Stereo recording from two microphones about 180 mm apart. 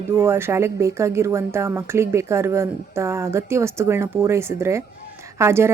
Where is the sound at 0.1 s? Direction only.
15° right (ahead or behind).